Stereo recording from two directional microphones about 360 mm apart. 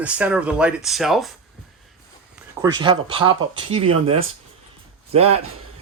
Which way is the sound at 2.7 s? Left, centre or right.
Centre.